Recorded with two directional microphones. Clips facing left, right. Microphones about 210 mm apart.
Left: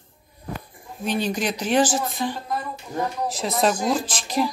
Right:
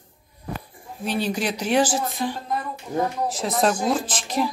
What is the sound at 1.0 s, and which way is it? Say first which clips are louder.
A woman's voice: even; 10° right (ahead or behind).